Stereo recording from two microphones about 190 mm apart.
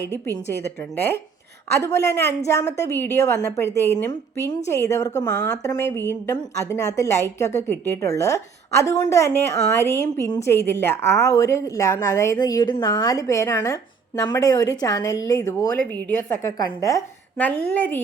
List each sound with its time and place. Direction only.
1.7 s a woman's voice: 15° left (ahead or behind)